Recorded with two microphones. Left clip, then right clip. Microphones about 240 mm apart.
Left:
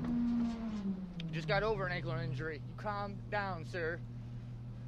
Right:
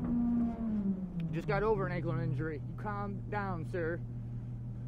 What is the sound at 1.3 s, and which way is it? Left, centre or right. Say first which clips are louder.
Speech: right 2 dB; right.